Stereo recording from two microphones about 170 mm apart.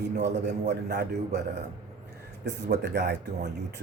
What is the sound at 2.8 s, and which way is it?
Speech, 75° right (ahead or behind).